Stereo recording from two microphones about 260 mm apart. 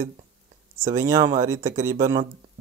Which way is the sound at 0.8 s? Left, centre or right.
Centre.